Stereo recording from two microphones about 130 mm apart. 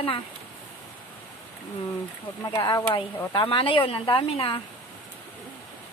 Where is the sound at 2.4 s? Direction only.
25° left (ahead or behind).